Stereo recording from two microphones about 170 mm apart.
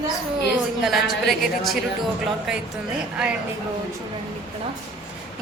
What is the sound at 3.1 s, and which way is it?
Speech, 5° right (ahead or behind).